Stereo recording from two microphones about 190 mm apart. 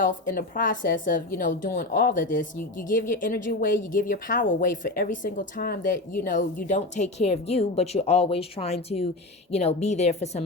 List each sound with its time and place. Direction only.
0.0 s a woman's voice: 45° left (ahead or behind)